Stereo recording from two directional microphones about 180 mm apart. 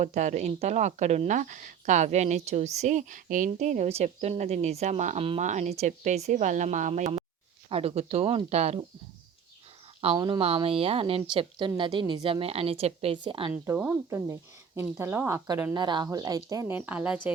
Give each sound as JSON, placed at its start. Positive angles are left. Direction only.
{"t": 0.0, "sound": "speech", "side_deg": -40}
{"t": 10.0, "sound": "a woman's voice", "side_deg": -30}
{"t": 13.5, "sound": "a woman's voice", "side_deg": -10}